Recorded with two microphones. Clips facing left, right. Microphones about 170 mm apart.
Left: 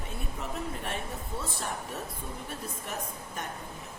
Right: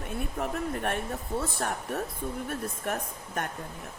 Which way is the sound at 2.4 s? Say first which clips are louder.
Right 6 dB; 55° right (ahead or behind).